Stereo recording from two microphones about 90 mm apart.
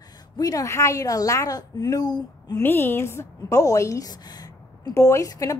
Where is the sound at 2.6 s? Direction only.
25° left (ahead or behind); by 4.9 s 50° left (ahead or behind).